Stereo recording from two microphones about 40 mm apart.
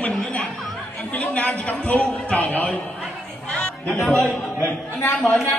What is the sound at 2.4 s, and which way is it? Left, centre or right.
Speech, left.